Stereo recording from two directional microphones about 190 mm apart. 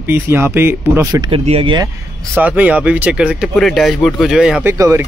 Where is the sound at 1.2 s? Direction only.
30° right (ahead or behind).